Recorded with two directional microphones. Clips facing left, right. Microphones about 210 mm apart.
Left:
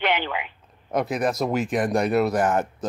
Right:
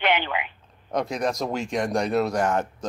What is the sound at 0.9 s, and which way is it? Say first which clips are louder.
Speech: left 2 dB; 5° left (ahead or behind).